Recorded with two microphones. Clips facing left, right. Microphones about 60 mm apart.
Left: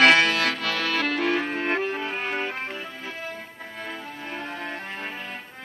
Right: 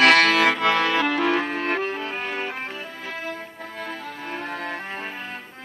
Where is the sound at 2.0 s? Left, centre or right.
Centre.